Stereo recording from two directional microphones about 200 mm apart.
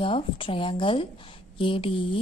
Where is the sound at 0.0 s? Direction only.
25° left (ahead or behind).